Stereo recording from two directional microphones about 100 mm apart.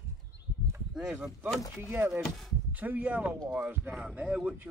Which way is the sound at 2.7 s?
15° right (ahead or behind).